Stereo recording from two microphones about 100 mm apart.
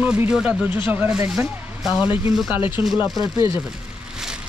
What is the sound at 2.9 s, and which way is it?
Speech, 45° left (ahead or behind).